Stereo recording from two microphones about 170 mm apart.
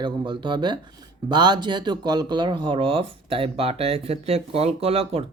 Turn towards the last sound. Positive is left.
turn(degrees=-35)  # may be behind; listen again after turning